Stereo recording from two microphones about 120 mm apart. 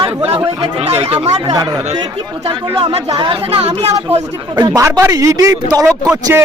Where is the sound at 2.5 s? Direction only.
40° right (ahead or behind).